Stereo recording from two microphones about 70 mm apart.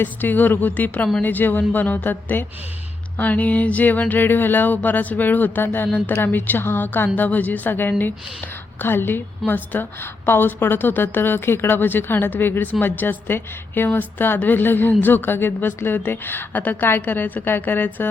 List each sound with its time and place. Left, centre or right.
0.0 s a woman's voice: left